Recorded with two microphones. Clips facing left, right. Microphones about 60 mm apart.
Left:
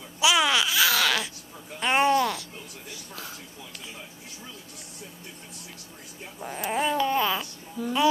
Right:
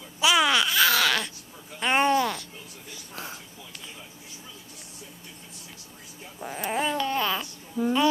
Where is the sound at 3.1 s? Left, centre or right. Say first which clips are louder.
Right 3 dB; right.